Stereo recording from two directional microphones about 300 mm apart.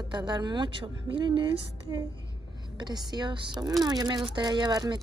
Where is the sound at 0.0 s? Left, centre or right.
Centre.